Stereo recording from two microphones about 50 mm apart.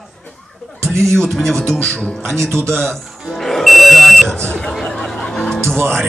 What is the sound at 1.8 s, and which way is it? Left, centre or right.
Speech, centre.